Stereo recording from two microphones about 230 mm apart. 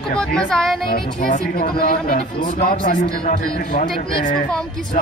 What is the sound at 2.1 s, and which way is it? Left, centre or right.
Speech, left.